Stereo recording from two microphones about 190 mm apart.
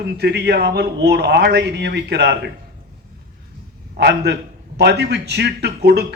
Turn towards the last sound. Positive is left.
turn(degrees=-60)  # may be behind; listen again after turning